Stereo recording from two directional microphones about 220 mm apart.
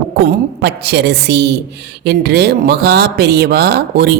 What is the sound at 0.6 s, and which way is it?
Speech, 50° right (ahead or behind).